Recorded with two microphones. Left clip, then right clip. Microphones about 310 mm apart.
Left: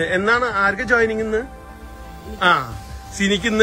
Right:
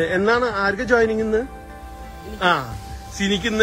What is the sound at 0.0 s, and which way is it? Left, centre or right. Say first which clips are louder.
Speech: left 1 dB; centre.